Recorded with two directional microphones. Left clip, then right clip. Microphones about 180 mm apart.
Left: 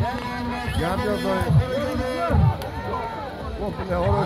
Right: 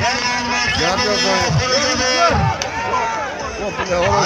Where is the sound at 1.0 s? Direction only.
Centre (ahead or behind).